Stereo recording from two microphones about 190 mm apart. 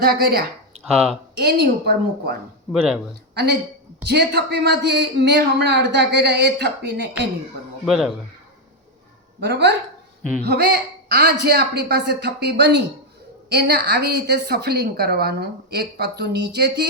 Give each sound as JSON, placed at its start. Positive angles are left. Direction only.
{"t": 0.0, "sound": "speech", "side_deg": -55}
{"t": 0.8, "sound": "speech", "side_deg": 0}
{"t": 1.4, "sound": "a woman's voice", "side_deg": -60}
{"t": 4.0, "sound": "a woman's voice", "side_deg": -60}
{"t": 7.9, "sound": "speech", "side_deg": 0}
{"t": 9.4, "sound": "a woman's voice", "side_deg": -60}